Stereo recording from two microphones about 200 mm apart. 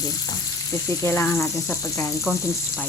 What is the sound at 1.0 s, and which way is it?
Speech, 10° left (ahead or behind).